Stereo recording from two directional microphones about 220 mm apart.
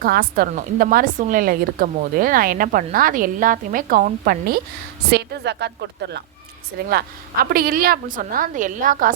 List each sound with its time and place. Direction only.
0.0 s a woman's voice: 40° right (ahead or behind)
7.5 s a woman's voice: 40° right (ahead or behind)